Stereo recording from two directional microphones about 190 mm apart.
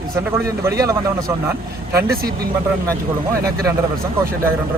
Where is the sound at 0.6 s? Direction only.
15° right (ahead or behind).